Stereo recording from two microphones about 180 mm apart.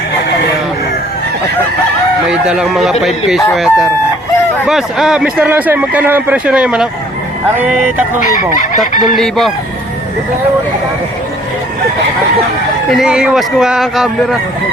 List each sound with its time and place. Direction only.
2.2 s a man's voice: 5° right (ahead or behind)
8.9 s speech: 45° left (ahead or behind)
9.1 s speech: centre (ahead or behind)
12.9 s speech: 5° right (ahead or behind)